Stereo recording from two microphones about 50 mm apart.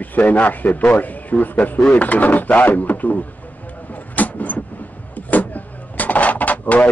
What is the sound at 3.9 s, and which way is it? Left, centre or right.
Vehicle, left.